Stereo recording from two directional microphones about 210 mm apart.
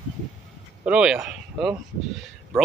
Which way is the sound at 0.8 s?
5° right (ahead or behind).